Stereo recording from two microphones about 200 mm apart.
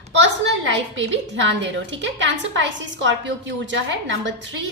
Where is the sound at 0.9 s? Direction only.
65° right (ahead or behind).